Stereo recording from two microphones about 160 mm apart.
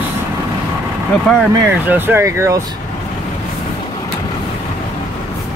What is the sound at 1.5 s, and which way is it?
Speech, 15° right (ahead or behind).